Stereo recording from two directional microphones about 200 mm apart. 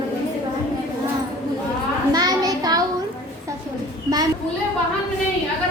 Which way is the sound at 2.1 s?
20° right (ahead or behind).